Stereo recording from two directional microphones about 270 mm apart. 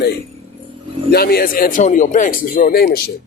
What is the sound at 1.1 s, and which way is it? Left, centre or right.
A man's voice, left.